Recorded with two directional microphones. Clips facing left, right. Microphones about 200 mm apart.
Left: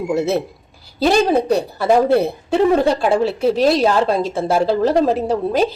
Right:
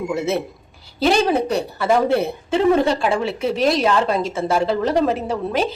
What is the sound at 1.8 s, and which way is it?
A woman's voice, 35° left (ahead or behind).